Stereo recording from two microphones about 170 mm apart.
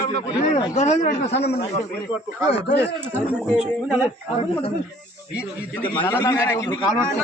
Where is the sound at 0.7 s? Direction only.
45° left (ahead or behind).